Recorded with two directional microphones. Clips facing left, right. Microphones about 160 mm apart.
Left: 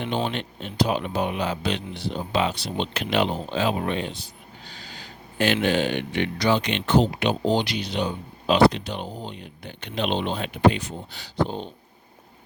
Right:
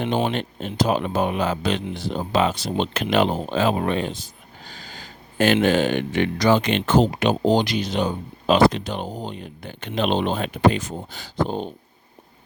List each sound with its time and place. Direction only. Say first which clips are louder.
0.0 s speech: right 4 dB; 45° right (ahead or behind)
4.6 s a sound: right 3 dB; 45° right (ahead or behind)
5.6 s speech: right 4 dB; 45° right (ahead or behind)